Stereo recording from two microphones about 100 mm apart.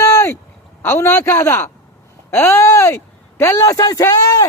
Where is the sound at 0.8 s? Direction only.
25° left (ahead or behind).